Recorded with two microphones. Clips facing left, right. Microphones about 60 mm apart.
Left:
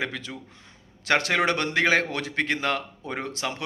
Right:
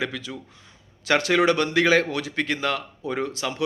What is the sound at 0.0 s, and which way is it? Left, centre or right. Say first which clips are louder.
A man's voice: right 2 dB; left.